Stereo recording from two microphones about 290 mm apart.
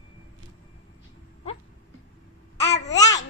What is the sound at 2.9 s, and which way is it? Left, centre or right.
Babbling, centre.